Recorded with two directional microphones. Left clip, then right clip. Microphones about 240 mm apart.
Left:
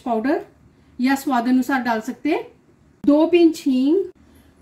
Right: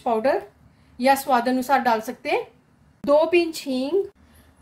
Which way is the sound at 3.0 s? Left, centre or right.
Right.